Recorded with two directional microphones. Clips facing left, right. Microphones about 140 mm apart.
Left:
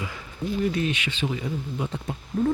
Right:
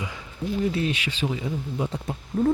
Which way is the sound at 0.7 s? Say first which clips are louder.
Even; 35° right (ahead or behind).